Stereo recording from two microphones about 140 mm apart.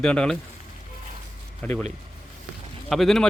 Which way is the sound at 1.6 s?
10° left (ahead or behind).